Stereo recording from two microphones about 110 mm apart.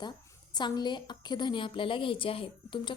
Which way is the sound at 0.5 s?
40° left (ahead or behind).